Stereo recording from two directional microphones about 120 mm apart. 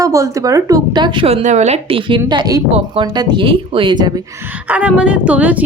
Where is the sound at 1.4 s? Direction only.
70° right (ahead or behind).